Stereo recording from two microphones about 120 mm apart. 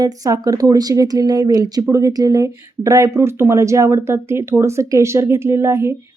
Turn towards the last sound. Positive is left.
turn(degrees=-20)  # may be behind; listen again after turning